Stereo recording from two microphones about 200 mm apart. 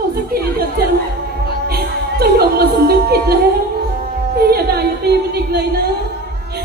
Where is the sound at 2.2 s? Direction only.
50° right (ahead or behind).